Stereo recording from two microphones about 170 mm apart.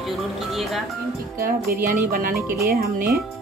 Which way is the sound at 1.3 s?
60° right (ahead or behind).